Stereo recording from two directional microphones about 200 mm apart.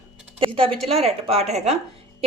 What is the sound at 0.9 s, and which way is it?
Speech, 30° right (ahead or behind).